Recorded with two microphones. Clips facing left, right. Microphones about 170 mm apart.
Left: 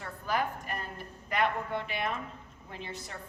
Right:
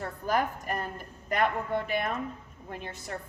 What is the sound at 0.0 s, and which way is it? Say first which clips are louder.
A woman's voice: right 4 dB; 45° right (ahead or behind).